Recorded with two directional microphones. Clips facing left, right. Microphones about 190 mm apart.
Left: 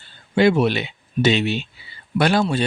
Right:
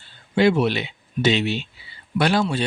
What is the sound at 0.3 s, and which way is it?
Speech, 50° left (ahead or behind).